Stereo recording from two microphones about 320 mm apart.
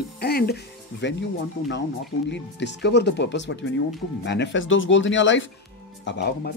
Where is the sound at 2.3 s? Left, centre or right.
Left.